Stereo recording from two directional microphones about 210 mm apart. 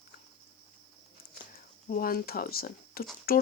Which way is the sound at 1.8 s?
40° left (ahead or behind).